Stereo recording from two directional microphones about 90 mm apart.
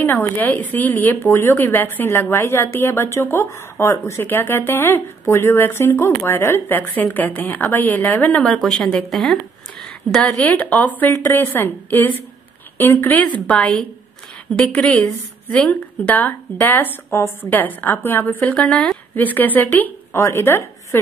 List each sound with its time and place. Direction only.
0.0 s speech: 20° left (ahead or behind); by 10.3 s 5° left (ahead or behind)
10.4 s a woman's voice: 20° left (ahead or behind)
20.2 s a woman's voice: 30° left (ahead or behind)